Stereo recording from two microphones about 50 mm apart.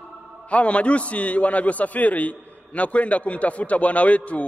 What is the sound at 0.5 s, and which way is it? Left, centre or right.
A man's voice, left.